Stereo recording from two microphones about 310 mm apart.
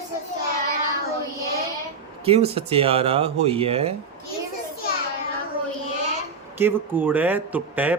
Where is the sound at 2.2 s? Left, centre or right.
Centre.